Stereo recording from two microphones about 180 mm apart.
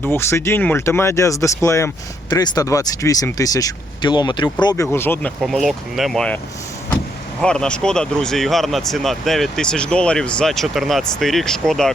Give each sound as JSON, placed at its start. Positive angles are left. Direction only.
{"t": 0.0, "sound": "speech", "side_deg": 15}
{"t": 5.4, "sound": "speech", "side_deg": 0}
{"t": 7.4, "sound": "speech", "side_deg": 5}